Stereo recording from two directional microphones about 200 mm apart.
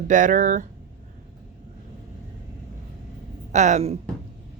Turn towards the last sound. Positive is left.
turn(degrees=-35)  # may be behind; listen again after turning